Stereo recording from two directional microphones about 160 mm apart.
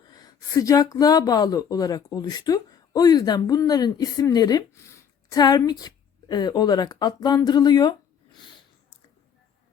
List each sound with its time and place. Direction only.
0.1 s a woman's voice: 25° left (ahead or behind)